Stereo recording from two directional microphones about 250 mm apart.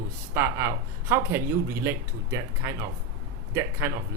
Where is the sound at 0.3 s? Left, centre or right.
Centre.